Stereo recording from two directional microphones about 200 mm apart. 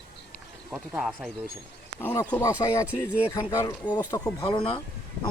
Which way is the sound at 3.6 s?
20° left (ahead or behind).